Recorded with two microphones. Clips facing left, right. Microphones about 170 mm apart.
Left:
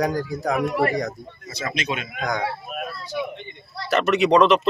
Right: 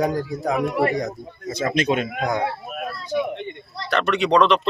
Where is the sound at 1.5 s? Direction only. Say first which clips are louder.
Right 7 dB; 50° right (ahead or behind).